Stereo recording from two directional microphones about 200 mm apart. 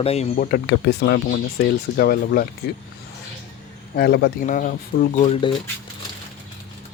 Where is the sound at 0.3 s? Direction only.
50° left (ahead or behind).